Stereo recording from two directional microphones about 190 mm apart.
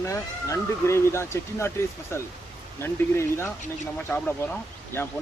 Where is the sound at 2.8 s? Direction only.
15° left (ahead or behind).